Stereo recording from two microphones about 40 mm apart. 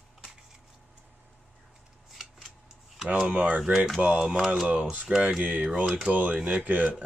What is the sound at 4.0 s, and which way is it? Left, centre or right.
Speech, right.